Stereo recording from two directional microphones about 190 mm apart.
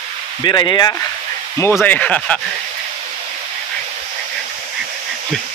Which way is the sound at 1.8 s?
10° left (ahead or behind).